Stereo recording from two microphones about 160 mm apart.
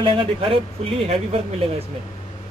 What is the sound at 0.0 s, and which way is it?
Speech, 35° right (ahead or behind).